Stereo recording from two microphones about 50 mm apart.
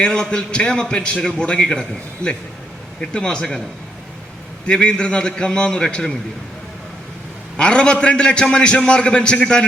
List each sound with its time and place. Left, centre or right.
0.0 s a man's voice: centre
4.6 s a man's voice: centre
7.5 s a man's voice: centre